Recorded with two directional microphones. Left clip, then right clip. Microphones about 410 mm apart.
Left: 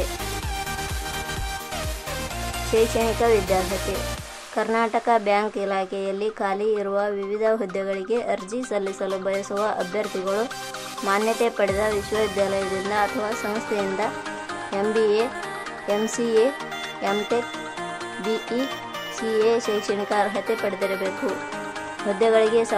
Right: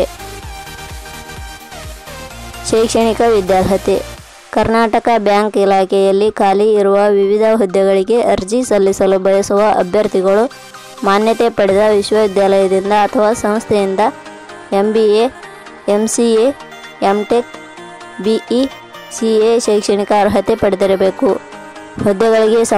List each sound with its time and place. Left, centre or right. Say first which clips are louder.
2.7 s speech: right 9 dB; right
4.6 s speech: right 10 dB; centre
22.2 s speech: right 7 dB; right